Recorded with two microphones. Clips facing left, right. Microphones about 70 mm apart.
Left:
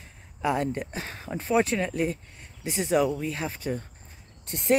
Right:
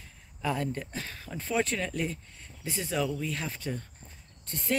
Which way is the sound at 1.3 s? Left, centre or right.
Centre.